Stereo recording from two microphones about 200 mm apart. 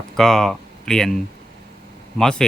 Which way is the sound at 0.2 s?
Centre (ahead or behind).